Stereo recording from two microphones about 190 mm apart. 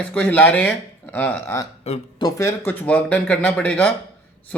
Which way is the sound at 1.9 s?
35° left (ahead or behind).